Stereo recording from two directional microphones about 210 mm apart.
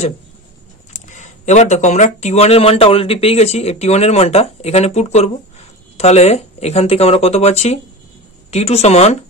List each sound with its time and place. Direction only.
0.9 s speech: 35° left (ahead or behind)